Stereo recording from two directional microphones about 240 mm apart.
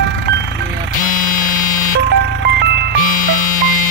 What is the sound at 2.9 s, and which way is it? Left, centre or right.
Music, left.